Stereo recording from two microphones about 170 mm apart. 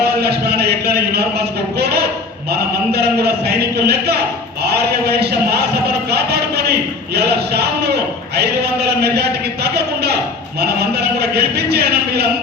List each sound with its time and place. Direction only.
0.0 s a man's voice: 70° right (ahead or behind)
4.6 s a sound: 70° right (ahead or behind)
9.6 s music: 70° right (ahead or behind)
10.6 s a man's voice: 70° right (ahead or behind)